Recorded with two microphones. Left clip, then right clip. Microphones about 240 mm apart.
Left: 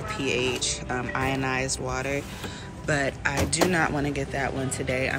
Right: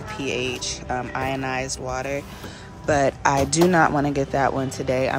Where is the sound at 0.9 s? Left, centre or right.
Centre.